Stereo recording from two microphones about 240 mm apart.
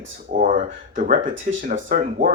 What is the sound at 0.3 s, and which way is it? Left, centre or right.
Speech, right.